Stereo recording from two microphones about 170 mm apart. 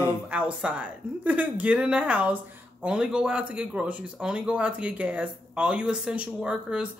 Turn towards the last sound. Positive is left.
turn(degrees=-5)  # may be behind; listen again after turning